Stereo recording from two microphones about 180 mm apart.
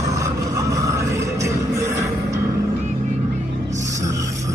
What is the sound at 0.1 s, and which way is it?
Music, 15° right (ahead or behind).